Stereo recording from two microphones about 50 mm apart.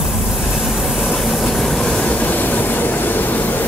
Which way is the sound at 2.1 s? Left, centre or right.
Left.